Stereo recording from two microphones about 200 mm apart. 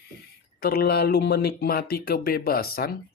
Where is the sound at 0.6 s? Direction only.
50° left (ahead or behind).